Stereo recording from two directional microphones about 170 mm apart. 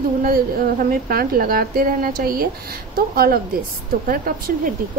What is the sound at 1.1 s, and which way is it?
Speech, 60° right (ahead or behind).